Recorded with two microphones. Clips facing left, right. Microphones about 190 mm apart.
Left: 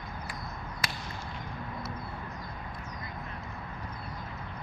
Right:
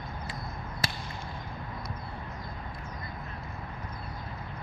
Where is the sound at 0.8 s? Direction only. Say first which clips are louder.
Right 3 dB; 30° right (ahead or behind).